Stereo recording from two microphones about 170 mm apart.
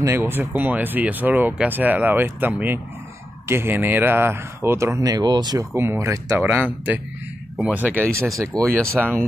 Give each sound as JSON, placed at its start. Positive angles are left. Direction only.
{"t": 0.0, "sound": "speech", "side_deg": -15}